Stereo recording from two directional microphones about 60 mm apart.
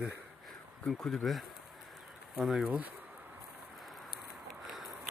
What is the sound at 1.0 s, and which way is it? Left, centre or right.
Speech, centre.